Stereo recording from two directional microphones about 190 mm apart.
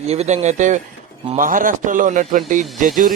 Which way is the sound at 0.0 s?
35° right (ahead or behind).